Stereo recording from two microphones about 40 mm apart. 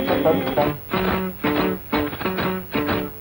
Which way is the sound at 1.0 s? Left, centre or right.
Centre.